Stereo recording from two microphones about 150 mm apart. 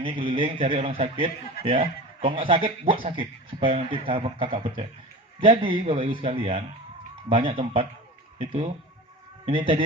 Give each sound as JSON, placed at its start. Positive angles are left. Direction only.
{"t": 0.0, "sound": "a man's voice", "side_deg": -35}